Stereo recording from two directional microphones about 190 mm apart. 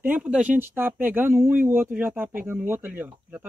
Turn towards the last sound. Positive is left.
turn(degrees=-10)  # may be behind; listen again after turning